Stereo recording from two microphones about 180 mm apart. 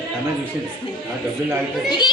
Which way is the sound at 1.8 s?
25° left (ahead or behind).